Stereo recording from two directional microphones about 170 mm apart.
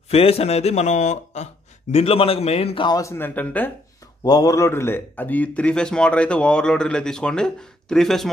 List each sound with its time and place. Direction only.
0.1 s speech: 35° left (ahead or behind)
3.0 s speech: 15° left (ahead or behind)
4.2 s a man's voice: 20° left (ahead or behind); by 8.3 s centre (ahead or behind)